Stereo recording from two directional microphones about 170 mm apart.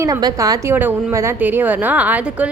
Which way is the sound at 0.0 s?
20° right (ahead or behind).